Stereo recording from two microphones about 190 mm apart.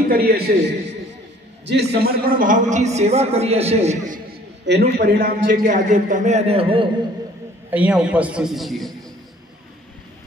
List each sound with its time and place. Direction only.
0.1 s a man's voice: 55° right (ahead or behind); by 4.2 s 35° right (ahead or behind)
4.9 s a man's voice: 55° right (ahead or behind)
5.7 s a man's voice: 40° right (ahead or behind)
7.7 s a man's voice: 5° right (ahead or behind)